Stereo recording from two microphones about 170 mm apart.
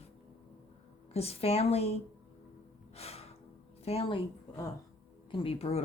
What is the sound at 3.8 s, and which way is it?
Speech, 35° left (ahead or behind).